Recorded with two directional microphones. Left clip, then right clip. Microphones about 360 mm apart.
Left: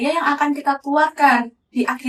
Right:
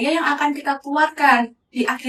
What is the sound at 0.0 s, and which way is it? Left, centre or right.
A woman's voice, centre.